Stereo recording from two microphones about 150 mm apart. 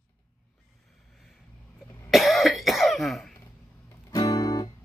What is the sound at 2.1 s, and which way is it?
Cough, centre (ahead or behind).